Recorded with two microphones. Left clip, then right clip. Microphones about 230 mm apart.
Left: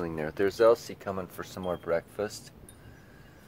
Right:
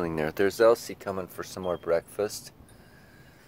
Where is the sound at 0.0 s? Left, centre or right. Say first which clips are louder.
Right 3 dB; right.